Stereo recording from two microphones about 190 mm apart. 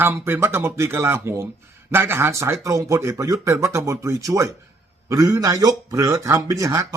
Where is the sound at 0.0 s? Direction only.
10° right (ahead or behind).